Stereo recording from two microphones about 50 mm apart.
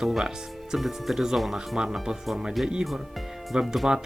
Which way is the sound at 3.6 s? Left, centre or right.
Centre.